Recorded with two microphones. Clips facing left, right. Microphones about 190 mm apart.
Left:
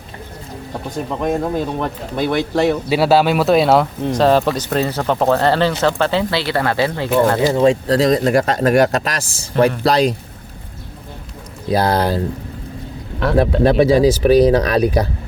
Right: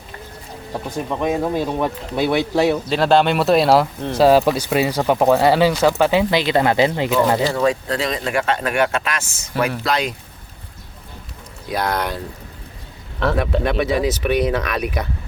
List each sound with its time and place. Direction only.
0.9 s speech: centre (ahead or behind)
2.9 s speech: 5° left (ahead or behind); by 7.1 s 20° right (ahead or behind)
7.5 s speech: 25° left (ahead or behind)
11.7 s speech: 30° left (ahead or behind)
13.6 s speech: 30° left (ahead or behind)